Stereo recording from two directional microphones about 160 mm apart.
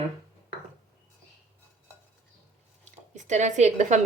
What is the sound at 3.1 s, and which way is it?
Speech, 50° right (ahead or behind).